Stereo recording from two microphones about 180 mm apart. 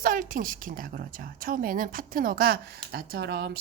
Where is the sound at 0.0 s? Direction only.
50° right (ahead or behind).